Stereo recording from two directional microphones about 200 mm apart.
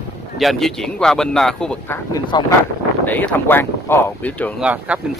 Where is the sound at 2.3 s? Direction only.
20° left (ahead or behind).